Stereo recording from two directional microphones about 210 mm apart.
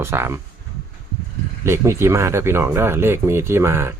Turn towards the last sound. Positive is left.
turn(degrees=-10)  # may be behind; listen again after turning